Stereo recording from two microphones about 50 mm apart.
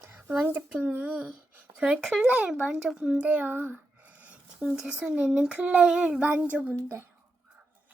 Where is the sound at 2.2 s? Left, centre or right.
Right.